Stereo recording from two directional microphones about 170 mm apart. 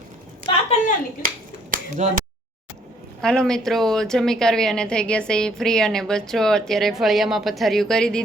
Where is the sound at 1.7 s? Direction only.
50° right (ahead or behind).